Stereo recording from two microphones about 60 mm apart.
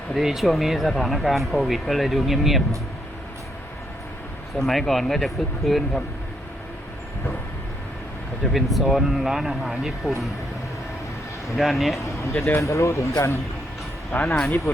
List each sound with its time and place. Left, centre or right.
0.1 s speech: centre
4.5 s speech: centre
8.5 s speech: centre
11.5 s speech: centre
11.9 s speech: left
14.2 s speech: centre
14.4 s speech: left